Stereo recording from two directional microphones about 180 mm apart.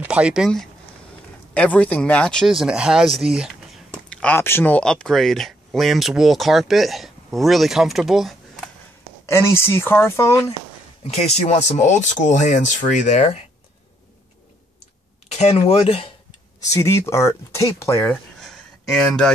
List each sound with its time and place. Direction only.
0.0 s speech: 5° right (ahead or behind)
4.1 s speech: 10° left (ahead or behind)
9.2 s speech: 15° left (ahead or behind)
11.1 s speech: 35° left (ahead or behind)
15.2 s speech: 35° left (ahead or behind)
16.7 s speech: 15° left (ahead or behind)
18.1 s a sound: 5° left (ahead or behind)